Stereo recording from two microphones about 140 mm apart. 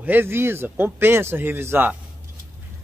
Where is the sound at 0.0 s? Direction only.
15° right (ahead or behind).